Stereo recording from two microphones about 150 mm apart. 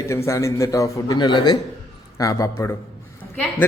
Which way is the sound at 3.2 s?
10° left (ahead or behind).